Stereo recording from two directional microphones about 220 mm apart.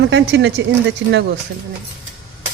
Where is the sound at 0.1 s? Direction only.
55° right (ahead or behind).